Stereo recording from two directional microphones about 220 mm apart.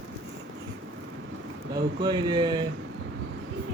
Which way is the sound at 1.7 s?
20° right (ahead or behind).